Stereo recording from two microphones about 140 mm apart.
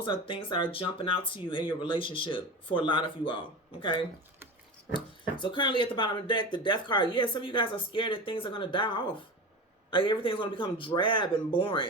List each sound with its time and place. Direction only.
0.0 s speech: 40° left (ahead or behind)
4.9 s speech: 35° left (ahead or behind)